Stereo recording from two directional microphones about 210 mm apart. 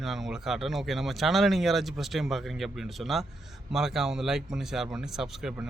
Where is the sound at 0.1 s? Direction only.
Centre (ahead or behind).